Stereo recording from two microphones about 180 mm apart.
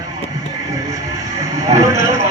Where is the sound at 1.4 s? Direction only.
20° right (ahead or behind).